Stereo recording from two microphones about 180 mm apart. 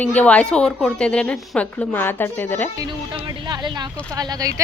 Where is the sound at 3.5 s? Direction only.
25° right (ahead or behind).